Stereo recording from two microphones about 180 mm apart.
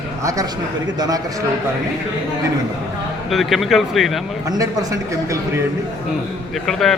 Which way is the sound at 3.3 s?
Centre (ahead or behind).